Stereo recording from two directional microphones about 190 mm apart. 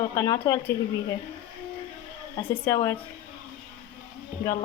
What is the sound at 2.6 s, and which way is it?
Speech, 15° left (ahead or behind).